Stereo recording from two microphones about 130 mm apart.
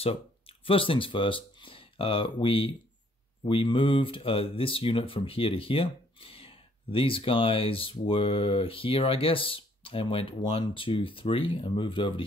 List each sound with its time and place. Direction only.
0.0 s speech: 45° left (ahead or behind)